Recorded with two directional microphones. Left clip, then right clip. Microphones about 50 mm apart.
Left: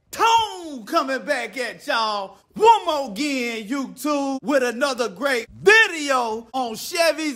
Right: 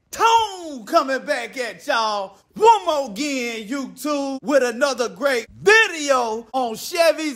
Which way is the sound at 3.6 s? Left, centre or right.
Left.